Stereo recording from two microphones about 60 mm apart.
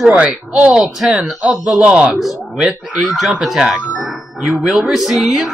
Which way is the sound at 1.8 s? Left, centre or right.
Right.